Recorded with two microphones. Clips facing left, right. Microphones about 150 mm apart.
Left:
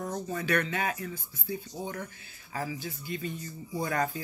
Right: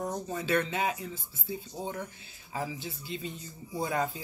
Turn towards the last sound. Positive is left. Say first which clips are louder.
# left 1 dB
turn(degrees=-20)  # may be behind; listen again after turning